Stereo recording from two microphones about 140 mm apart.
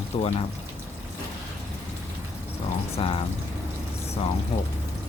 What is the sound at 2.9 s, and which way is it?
Speech, 40° left (ahead or behind).